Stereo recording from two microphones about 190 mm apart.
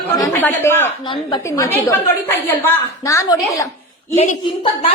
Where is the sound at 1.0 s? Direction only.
25° left (ahead or behind).